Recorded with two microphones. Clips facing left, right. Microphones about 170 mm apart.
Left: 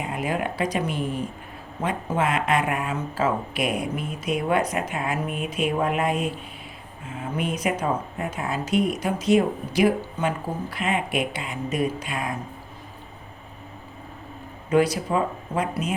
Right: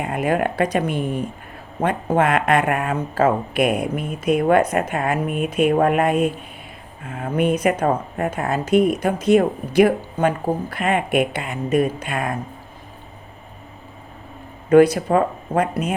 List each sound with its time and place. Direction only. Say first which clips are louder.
0.0 s speech: right 6 dB; 55° right (ahead or behind)
14.7 s speech: right 8 dB; 55° right (ahead or behind)